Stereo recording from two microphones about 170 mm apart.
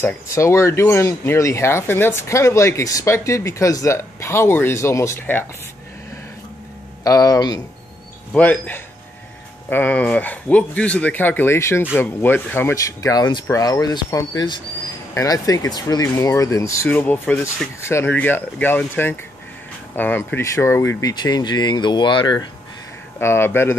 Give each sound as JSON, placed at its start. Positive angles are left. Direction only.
{"t": 0.0, "sound": "speech", "side_deg": 15}
{"t": 7.1, "sound": "speech", "side_deg": 20}
{"t": 8.3, "sound": "speech", "side_deg": 10}
{"t": 23.1, "sound": "speech", "side_deg": 15}